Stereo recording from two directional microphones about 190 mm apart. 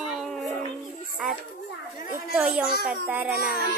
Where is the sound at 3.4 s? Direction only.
55° left (ahead or behind).